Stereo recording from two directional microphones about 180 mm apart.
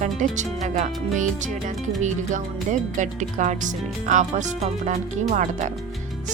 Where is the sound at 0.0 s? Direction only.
45° right (ahead or behind).